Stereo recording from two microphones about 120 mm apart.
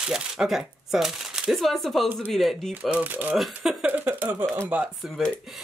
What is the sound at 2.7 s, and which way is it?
Speech, 10° right (ahead or behind).